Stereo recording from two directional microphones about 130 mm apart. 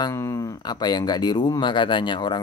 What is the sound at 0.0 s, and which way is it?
Speech, 25° left (ahead or behind).